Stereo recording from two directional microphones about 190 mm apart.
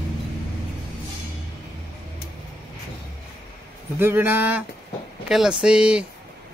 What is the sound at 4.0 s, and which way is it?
Speech, 10° right (ahead or behind).